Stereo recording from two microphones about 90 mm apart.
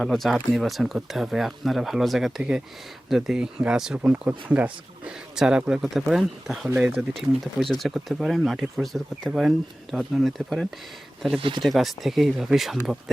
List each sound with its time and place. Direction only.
0.0 s speech: centre (ahead or behind)
3.9 s speech: 15° right (ahead or behind); by 10.7 s centre (ahead or behind)
11.3 s speech: 80° right
11.6 s speech: centre (ahead or behind)